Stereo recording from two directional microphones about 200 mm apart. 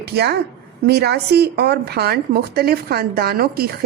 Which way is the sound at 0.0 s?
55° right (ahead or behind).